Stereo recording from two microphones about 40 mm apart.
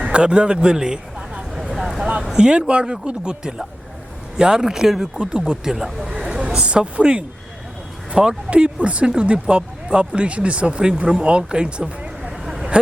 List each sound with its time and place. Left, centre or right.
0.0 s a man's voice: right
2.8 s speech: centre
3.1 s speech: right
5.2 s speech: right
6.1 s a sound: centre
6.6 s speech: right